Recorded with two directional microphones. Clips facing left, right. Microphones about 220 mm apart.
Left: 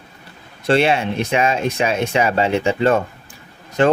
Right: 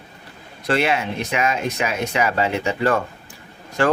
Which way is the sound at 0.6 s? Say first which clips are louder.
Left 4 dB; 30° left (ahead or behind).